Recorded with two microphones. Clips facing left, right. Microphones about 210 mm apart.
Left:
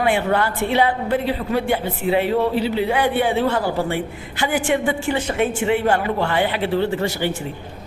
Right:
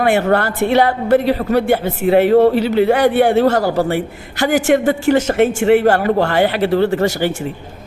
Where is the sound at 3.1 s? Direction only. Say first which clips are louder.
Right 7 dB; 75° right (ahead or behind).